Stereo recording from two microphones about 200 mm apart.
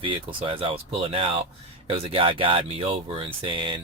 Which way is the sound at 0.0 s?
25° right (ahead or behind).